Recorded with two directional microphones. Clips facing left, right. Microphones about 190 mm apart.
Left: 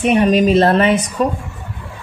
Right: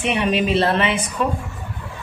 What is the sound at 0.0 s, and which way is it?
A woman's voice, 45° left (ahead or behind).